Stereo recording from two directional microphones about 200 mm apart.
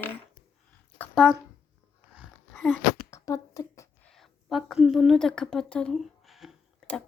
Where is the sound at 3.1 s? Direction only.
15° left (ahead or behind).